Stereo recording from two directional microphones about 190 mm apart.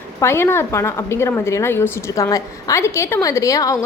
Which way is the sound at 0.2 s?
15° left (ahead or behind).